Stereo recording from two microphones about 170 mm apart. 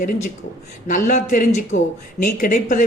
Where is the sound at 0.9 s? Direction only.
50° left (ahead or behind).